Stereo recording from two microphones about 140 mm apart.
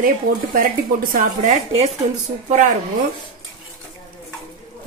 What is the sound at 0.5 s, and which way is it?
A woman's voice, 85° right.